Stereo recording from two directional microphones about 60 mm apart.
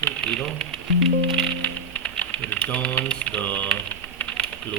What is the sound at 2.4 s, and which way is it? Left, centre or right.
Speech, centre.